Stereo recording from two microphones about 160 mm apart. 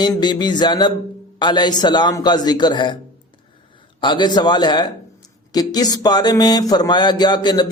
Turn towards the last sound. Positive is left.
turn(degrees=25)  # may be behind; listen again after turning